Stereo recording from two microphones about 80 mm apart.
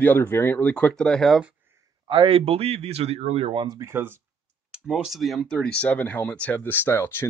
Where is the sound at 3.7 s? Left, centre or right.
Right.